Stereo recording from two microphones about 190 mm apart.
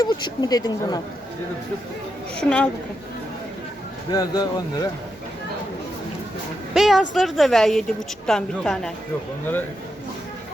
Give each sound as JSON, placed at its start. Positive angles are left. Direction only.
{"t": 0.0, "sound": "speech", "side_deg": 20}
{"t": 2.4, "sound": "a woman's voice", "side_deg": 5}
{"t": 4.1, "sound": "speech", "side_deg": 20}
{"t": 6.7, "sound": "a woman's voice", "side_deg": 0}